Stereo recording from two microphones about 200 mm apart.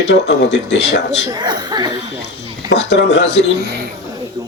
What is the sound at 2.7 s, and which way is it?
Speech, 60° left (ahead or behind).